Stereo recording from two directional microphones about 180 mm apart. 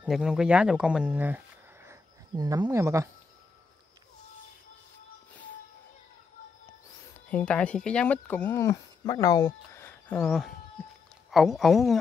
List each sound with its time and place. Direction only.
0.0 s speech: centre (ahead or behind)
1.9 s speech: 20° right (ahead or behind)
7.2 s speech: 10° left (ahead or behind)